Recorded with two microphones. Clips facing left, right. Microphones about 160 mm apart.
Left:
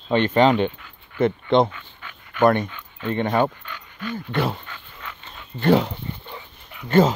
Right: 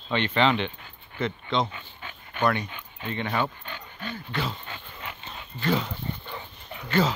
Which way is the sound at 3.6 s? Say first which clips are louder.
Left 4 dB; 30° right (ahead or behind).